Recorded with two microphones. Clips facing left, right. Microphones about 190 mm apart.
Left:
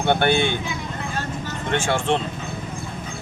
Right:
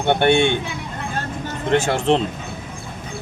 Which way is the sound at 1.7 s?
40° right (ahead or behind).